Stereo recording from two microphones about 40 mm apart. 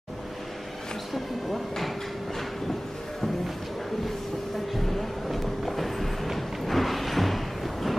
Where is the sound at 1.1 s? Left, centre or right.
Centre.